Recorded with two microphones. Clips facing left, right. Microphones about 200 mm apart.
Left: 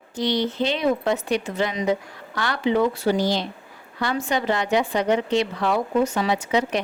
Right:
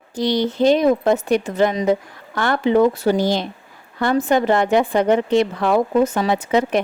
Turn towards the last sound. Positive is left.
turn(degrees=-50)  # may be behind; listen again after turning